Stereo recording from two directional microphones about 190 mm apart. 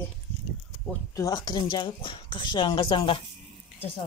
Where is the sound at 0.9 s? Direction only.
15° left (ahead or behind).